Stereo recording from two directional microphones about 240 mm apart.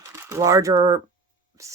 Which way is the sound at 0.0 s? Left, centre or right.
Centre.